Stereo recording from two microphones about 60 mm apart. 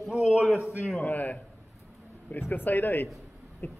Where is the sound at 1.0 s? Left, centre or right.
Left.